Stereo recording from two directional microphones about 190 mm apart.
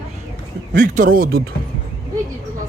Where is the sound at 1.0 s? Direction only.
45° right (ahead or behind).